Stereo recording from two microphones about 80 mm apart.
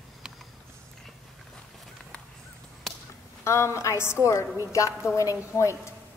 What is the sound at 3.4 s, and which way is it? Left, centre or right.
A woman's voice, left.